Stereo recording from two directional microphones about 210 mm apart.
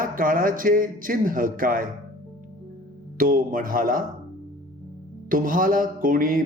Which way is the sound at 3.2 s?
40° right (ahead or behind).